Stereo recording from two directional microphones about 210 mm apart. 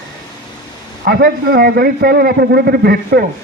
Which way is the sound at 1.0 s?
45° right (ahead or behind).